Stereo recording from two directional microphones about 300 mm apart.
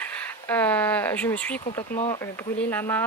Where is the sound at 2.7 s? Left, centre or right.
Centre.